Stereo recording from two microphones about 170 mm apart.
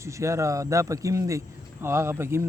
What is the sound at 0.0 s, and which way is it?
Speech, 15° right (ahead or behind).